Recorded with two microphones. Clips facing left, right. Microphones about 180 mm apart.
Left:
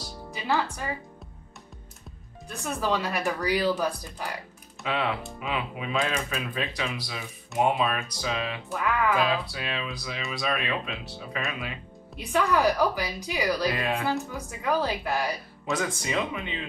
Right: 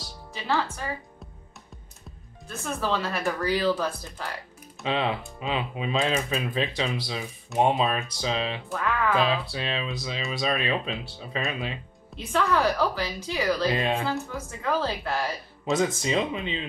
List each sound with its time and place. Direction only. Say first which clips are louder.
0.3 s a woman's voice: even; 15° left (ahead or behind)
2.6 s speech: even; 15° left (ahead or behind)
4.8 s speech: right 2 dB; 25° right (ahead or behind)
12.2 s speech: even; 15° left (ahead or behind)
13.7 s speech: right 2 dB; 25° right (ahead or behind)
14.3 s speech: even; 15° left (ahead or behind)
15.6 s speech: right 5 dB; 25° right (ahead or behind)